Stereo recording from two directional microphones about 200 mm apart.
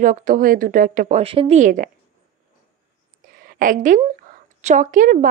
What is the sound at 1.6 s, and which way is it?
Speech, 40° right (ahead or behind).